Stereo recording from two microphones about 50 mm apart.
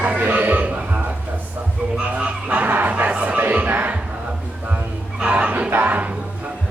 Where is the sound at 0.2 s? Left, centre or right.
Right.